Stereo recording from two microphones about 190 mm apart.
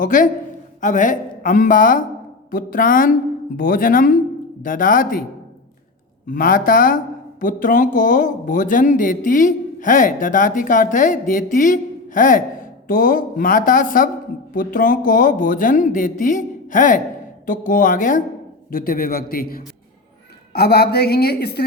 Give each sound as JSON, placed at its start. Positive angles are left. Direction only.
{"t": 0.0, "sound": "speech", "side_deg": 45}
{"t": 6.2, "sound": "a woman's voice", "side_deg": 45}